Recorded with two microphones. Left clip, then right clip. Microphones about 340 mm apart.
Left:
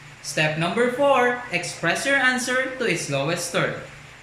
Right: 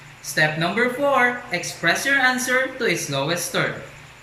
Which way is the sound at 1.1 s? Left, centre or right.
Centre.